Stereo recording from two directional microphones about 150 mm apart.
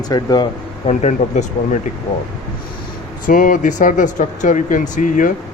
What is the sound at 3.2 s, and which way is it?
Speech, 65° left (ahead or behind).